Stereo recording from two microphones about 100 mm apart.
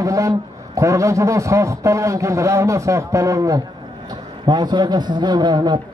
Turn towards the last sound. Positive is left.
turn(degrees=-50)  # may be behind; listen again after turning